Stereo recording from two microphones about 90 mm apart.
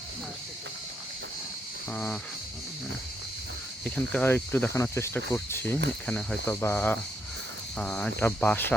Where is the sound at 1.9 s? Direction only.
15° left (ahead or behind).